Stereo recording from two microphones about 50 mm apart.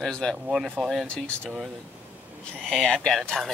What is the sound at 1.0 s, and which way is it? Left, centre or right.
Speech, centre.